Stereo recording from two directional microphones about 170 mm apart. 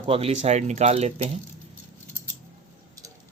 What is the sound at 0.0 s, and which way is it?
Speech, 35° right (ahead or behind).